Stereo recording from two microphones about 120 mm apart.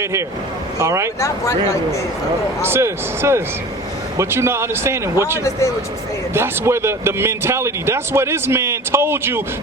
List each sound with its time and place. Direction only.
0.0 s speech: 25° right (ahead or behind)
2.6 s speech: 20° right (ahead or behind)